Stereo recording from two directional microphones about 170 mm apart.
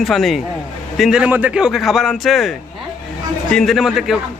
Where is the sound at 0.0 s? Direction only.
Centre (ahead or behind).